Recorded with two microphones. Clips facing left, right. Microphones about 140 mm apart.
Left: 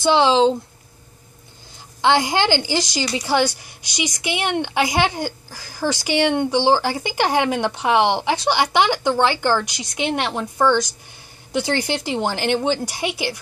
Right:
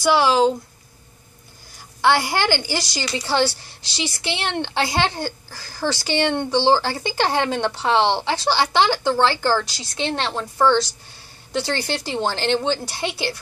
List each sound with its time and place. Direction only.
0.0 s speech: 20° left (ahead or behind)
2.0 s a woman's voice: 20° left (ahead or behind)